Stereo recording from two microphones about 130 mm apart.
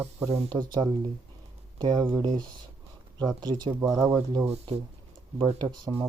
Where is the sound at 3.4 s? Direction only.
35° right (ahead or behind).